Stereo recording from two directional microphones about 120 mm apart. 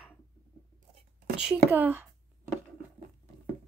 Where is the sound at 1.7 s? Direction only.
20° right (ahead or behind).